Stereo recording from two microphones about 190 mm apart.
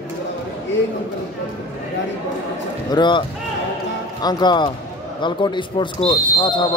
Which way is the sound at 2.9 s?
25° left (ahead or behind).